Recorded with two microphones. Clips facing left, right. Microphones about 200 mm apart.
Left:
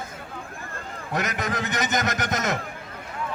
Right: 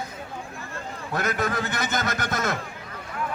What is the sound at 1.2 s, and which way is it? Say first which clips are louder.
A man's voice: right 1 dB; 15° left (ahead or behind).